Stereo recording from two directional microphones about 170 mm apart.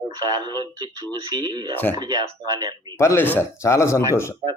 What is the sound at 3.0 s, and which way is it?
A man's voice, 15° left (ahead or behind).